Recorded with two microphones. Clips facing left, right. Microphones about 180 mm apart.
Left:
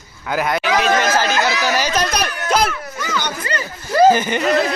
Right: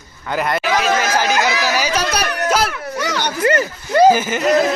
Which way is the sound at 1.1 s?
15° right (ahead or behind).